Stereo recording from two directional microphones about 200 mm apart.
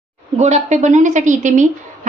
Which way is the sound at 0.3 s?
35° right (ahead or behind).